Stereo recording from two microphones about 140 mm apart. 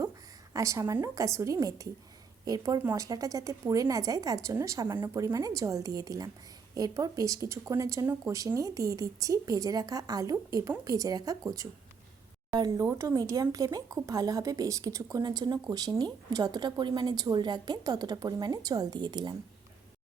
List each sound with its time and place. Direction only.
0.5 s speech: 20° right (ahead or behind)